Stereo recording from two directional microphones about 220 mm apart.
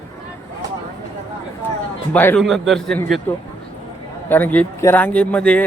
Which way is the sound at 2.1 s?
5° left (ahead or behind).